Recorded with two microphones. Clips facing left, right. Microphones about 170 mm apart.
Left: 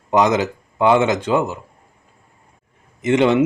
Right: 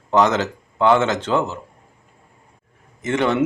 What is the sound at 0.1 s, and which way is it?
A man's voice, 15° left (ahead or behind).